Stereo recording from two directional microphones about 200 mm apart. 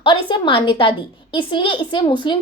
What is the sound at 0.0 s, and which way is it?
A woman's voice, 25° left (ahead or behind).